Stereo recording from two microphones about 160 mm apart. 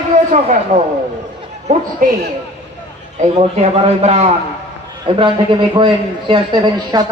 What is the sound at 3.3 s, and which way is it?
Speech, 40° right (ahead or behind).